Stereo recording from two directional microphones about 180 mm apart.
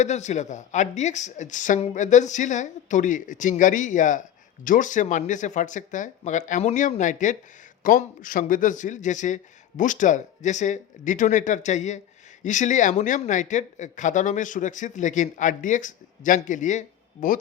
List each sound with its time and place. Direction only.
0.0 s speech: 40° left (ahead or behind)